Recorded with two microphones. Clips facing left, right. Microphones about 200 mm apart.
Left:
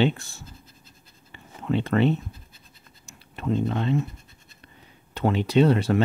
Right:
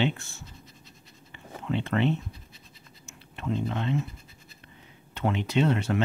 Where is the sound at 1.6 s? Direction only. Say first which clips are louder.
Left 4 dB; 40° left (ahead or behind).